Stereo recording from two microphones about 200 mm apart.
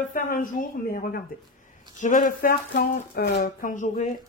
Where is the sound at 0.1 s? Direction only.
40° left (ahead or behind).